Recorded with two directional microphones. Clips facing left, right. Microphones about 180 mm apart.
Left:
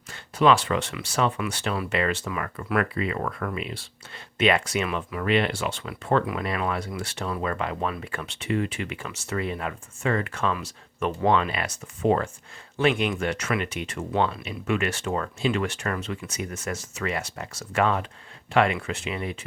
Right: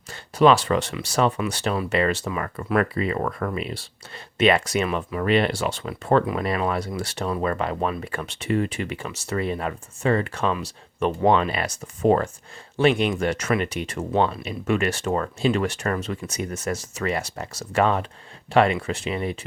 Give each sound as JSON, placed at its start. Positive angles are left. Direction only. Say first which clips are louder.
{"t": 0.1, "sound": "speech", "louder": "right 3 dB", "side_deg": -35}